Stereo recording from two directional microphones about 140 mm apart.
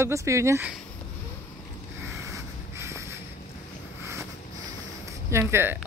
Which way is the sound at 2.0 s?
20° right (ahead or behind).